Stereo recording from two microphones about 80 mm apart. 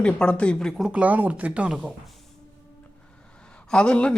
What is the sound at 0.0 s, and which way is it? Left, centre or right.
Speech, centre.